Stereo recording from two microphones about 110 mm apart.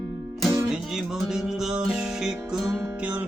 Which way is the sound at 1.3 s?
5° right (ahead or behind).